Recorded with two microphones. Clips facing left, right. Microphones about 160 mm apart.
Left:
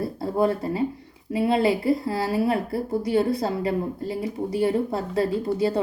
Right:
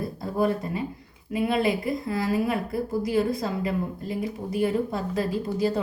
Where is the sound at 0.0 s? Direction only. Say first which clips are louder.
Left 3 dB; 30° left (ahead or behind).